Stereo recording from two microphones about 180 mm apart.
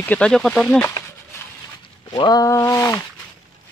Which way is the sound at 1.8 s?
25° left (ahead or behind).